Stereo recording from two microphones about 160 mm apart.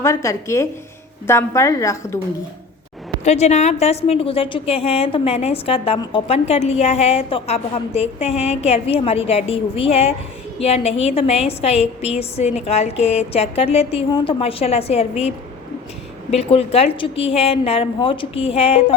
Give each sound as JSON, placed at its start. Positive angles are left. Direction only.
{"t": 0.0, "sound": "a woman's voice", "side_deg": 20}
{"t": 3.2, "sound": "a woman's voice", "side_deg": 45}
{"t": 16.3, "sound": "a woman's voice", "side_deg": 40}